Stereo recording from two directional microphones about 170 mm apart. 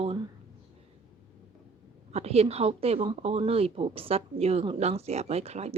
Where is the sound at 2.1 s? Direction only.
35° right (ahead or behind).